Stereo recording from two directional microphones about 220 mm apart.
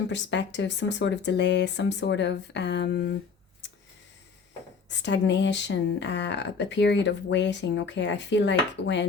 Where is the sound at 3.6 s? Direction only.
55° left (ahead or behind).